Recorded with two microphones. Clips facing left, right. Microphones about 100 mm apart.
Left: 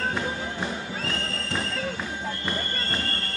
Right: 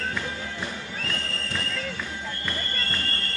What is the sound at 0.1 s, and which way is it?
Music, 30° left (ahead or behind).